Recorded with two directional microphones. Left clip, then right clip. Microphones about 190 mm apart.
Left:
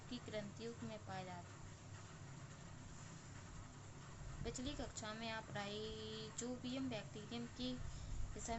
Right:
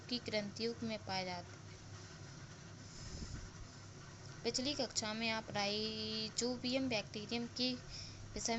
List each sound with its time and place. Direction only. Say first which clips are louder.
0.1 s a woman's voice: right 9 dB; 25° right (ahead or behind)
4.4 s a woman's voice: right 10 dB; 20° right (ahead or behind)